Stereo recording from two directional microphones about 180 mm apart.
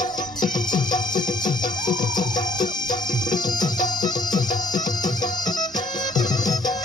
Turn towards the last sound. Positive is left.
turn(degrees=20)  # may be behind; listen again after turning